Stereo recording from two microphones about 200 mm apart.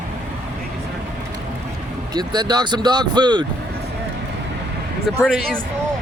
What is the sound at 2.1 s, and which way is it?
Speech, 20° right (ahead or behind).